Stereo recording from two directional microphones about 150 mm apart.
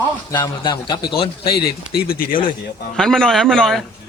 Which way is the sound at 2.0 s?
75° left (ahead or behind).